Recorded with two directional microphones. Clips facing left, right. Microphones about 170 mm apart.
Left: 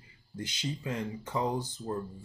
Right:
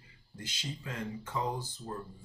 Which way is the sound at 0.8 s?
15° left (ahead or behind).